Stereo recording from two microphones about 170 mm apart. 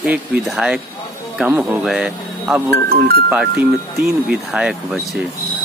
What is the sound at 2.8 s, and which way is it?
Speech, 65° right (ahead or behind).